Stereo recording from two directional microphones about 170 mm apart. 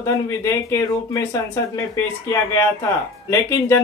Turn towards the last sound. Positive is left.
turn(degrees=15)  # may be behind; listen again after turning